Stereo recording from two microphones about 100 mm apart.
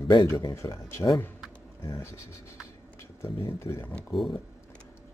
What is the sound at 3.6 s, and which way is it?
Speech, 30° left (ahead or behind).